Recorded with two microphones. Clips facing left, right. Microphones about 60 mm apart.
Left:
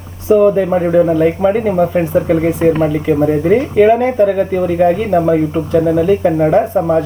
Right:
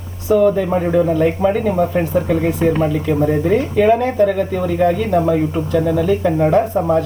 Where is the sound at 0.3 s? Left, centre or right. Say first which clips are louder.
Left 4 dB; left.